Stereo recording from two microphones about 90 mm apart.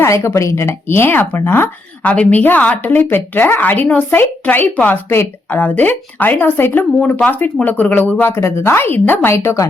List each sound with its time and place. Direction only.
0.0 s a woman's voice: 25° left (ahead or behind)